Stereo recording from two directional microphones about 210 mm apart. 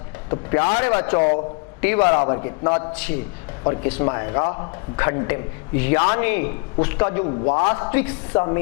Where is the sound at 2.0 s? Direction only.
25° left (ahead or behind).